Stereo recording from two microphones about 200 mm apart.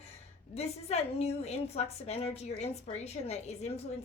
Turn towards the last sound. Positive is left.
turn(degrees=30)  # may be behind; listen again after turning